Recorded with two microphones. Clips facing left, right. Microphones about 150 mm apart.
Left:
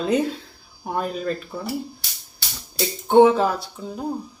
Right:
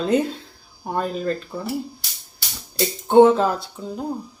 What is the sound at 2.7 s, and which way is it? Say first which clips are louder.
Speech: right 1 dB; centre (ahead or behind).